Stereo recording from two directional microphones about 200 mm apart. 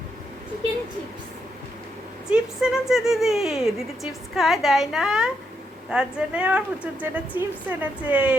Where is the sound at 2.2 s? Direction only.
5° right (ahead or behind).